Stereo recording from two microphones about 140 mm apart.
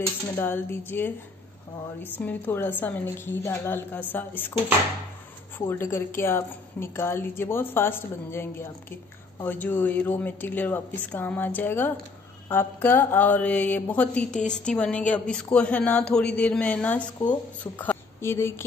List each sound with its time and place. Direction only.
0.0 s mantra: 15° left (ahead or behind)
2.1 s mantra: 15° left (ahead or behind)
5.7 s mantra: 15° left (ahead or behind)
17.3 s speech: 10° left (ahead or behind)